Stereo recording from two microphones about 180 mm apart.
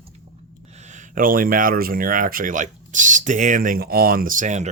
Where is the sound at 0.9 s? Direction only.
50° right (ahead or behind).